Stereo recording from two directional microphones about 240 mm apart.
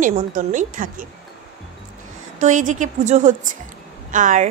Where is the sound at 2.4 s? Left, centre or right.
Right.